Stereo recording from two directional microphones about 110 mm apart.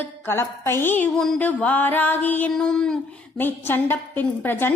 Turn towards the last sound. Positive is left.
turn(degrees=20)  # may be behind; listen again after turning